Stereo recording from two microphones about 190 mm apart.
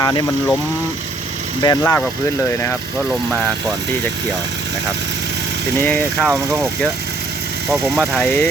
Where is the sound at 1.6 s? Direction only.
20° left (ahead or behind).